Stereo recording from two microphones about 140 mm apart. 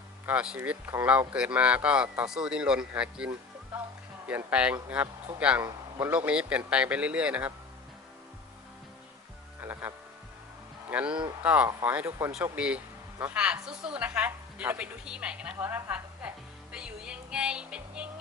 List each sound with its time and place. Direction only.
0.3 s a woman's voice: 10° right (ahead or behind)
5.6 s a man's voice: 20° right (ahead or behind)
6.1 s a woman's voice: 10° right (ahead or behind)
9.6 s music: 15° right (ahead or behind)
10.8 s a woman's voice: 10° right (ahead or behind)